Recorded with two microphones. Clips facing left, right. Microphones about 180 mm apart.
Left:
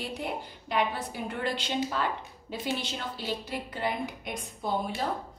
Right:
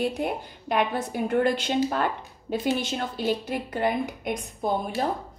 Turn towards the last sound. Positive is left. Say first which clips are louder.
# right 4 dB
turn(degrees=-50)  # may be behind; listen again after turning